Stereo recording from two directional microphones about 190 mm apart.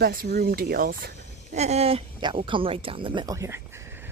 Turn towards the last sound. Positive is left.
turn(degrees=-15)  # may be behind; listen again after turning